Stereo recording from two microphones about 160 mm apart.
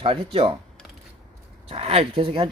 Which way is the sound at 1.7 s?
40° right (ahead or behind).